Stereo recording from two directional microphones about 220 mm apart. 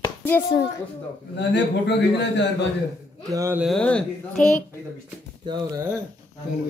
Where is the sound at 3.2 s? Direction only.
15° right (ahead or behind).